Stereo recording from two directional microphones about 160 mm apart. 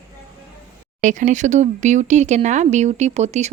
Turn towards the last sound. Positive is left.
turn(degrees=-45)  # may be behind; listen again after turning